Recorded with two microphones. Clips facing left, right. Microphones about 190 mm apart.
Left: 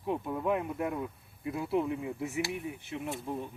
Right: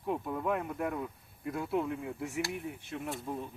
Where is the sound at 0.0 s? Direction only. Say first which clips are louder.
Left 1 dB; 5° left (ahead or behind).